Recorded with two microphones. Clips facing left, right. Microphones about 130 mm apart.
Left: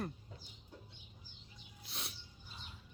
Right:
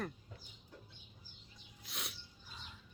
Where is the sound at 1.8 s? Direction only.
30° left (ahead or behind).